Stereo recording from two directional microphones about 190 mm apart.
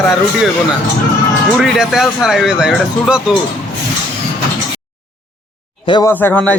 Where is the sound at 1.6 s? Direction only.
Centre (ahead or behind).